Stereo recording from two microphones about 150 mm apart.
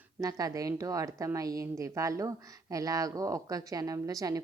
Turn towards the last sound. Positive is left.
turn(degrees=-25)  # may be behind; listen again after turning